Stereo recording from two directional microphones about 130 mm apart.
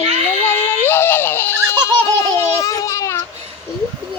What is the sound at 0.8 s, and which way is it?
Baby laughter, 15° left (ahead or behind).